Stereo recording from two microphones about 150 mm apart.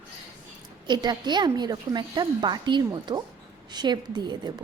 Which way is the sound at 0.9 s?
30° right (ahead or behind).